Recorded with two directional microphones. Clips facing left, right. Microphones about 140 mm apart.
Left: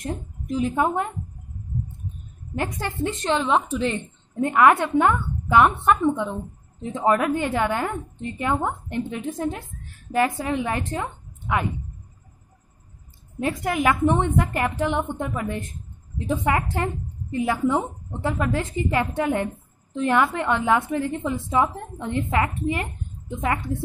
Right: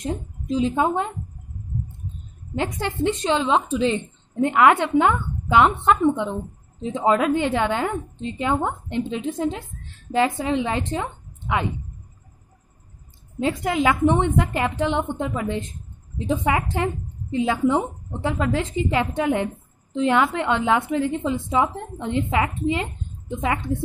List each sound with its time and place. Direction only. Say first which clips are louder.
0.0 s a woman's voice: right 3 dB; 20° right (ahead or behind)
2.5 s a woman's voice: right 2 dB; 20° right (ahead or behind)
13.7 s a woman's voice: right 1 dB; 20° right (ahead or behind)